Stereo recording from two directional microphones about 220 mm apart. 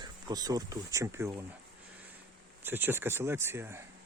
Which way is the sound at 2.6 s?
10° right (ahead or behind).